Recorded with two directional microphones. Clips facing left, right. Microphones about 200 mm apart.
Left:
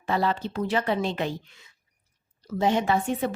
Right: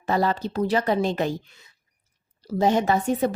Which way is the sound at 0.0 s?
40° right (ahead or behind).